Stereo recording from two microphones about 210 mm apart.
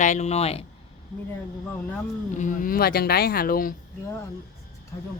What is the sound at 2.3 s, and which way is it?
Speech, 40° left (ahead or behind).